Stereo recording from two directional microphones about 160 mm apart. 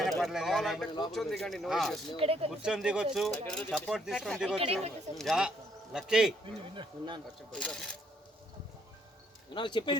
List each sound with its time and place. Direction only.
0.0 s speech: centre (ahead or behind)
2.1 s speech: 35° right (ahead or behind)
2.5 s speech: 5° right (ahead or behind)
4.5 s speech: 35° right (ahead or behind)
5.1 s speech: centre (ahead or behind)
6.4 s speech: 30° right (ahead or behind)
7.5 s speech: 5° left (ahead or behind)
9.6 s speech: 30° left (ahead or behind)